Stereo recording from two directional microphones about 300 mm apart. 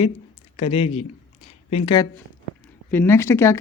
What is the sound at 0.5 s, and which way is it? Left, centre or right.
Speech, centre.